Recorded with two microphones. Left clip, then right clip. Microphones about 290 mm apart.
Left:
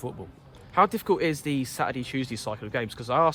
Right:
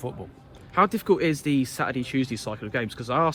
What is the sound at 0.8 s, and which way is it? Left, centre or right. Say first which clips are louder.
Speech: right 1 dB; left.